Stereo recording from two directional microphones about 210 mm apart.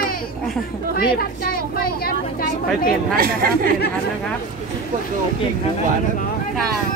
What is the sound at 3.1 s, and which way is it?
Speech, 45° right (ahead or behind).